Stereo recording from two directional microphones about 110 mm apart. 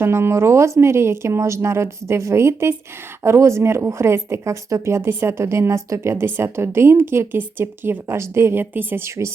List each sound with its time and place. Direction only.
0.0 s a woman's voice: 25° right (ahead or behind)